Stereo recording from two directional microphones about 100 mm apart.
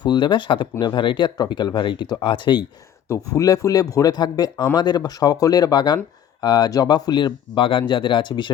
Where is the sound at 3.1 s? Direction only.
35° left (ahead or behind).